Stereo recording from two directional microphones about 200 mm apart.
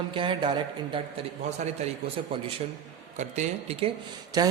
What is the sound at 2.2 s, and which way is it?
A man's voice, 25° right (ahead or behind).